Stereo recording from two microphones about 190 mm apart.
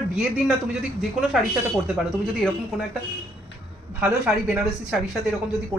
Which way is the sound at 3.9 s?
5° right (ahead or behind).